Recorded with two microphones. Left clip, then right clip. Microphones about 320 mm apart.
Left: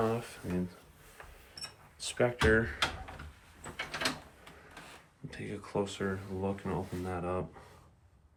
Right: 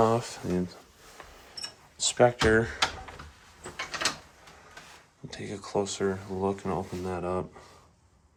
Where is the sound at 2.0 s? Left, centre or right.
Centre.